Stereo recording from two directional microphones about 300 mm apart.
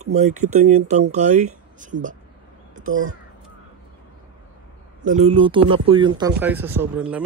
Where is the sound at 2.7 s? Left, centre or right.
Right.